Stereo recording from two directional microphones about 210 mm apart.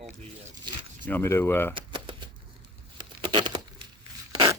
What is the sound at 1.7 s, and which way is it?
Shuffling cards, 20° right (ahead or behind).